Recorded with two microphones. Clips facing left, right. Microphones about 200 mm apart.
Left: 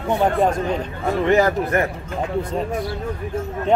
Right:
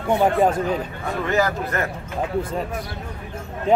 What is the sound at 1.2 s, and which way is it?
Speech, 20° left (ahead or behind).